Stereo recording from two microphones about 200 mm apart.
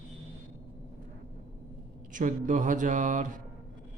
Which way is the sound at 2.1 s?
40° right (ahead or behind).